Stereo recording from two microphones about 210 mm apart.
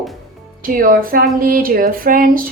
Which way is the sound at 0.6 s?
40° right (ahead or behind).